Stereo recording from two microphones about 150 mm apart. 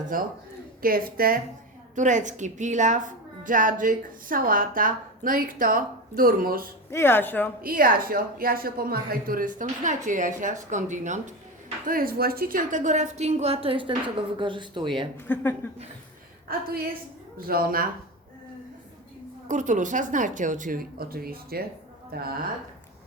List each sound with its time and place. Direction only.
0.1 s a woman's voice: 70° right (ahead or behind)
2.0 s a woman's voice: 55° right (ahead or behind); by 6.7 s 75° right (ahead or behind)
6.9 s speech: 15° left (ahead or behind)
7.6 s a woman's voice: 75° right (ahead or behind); by 11.3 s 55° right (ahead or behind)
11.9 s a woman's voice: 75° right (ahead or behind); by 15.0 s 30° right (ahead or behind)
15.3 s speech: 15° left (ahead or behind)
16.5 s a woman's voice: 85° right
19.5 s a woman's voice: 55° right (ahead or behind); by 22.3 s 90° right